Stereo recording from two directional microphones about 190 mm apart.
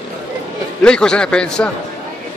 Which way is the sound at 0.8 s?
5° left (ahead or behind).